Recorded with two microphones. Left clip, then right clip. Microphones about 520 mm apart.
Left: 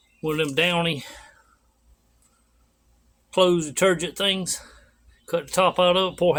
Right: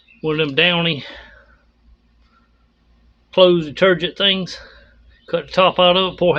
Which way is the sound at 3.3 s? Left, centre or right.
Left.